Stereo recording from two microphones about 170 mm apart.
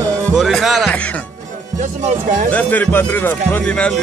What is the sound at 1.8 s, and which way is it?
Speech, 45° right (ahead or behind).